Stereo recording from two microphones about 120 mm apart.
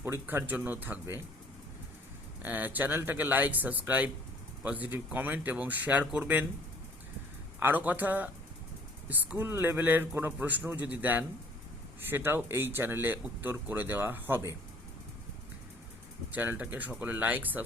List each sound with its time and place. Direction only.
0.0 s speech: 20° right (ahead or behind)
2.4 s speech: 15° right (ahead or behind)
7.6 s speech: 15° right (ahead or behind)
16.3 s speech: 15° right (ahead or behind)